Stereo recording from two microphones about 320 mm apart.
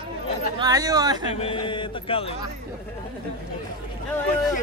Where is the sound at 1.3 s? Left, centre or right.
Centre.